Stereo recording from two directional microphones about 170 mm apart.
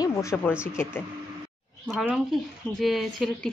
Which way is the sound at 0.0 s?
15° left (ahead or behind).